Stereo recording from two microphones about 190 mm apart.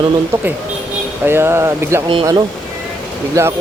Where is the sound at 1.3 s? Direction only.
10° right (ahead or behind).